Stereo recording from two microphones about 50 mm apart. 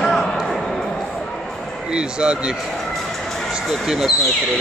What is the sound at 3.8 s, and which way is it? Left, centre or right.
Speech, centre.